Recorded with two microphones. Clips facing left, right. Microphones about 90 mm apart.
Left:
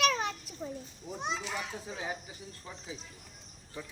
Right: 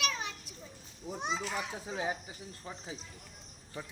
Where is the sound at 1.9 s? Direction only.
30° right (ahead or behind).